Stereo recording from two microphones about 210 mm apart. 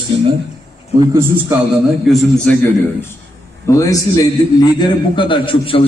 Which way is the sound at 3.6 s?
15° left (ahead or behind).